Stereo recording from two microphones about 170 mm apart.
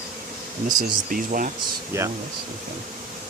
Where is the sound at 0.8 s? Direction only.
55° right (ahead or behind).